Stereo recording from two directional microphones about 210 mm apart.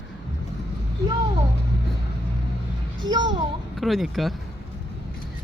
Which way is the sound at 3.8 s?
Centre (ahead or behind).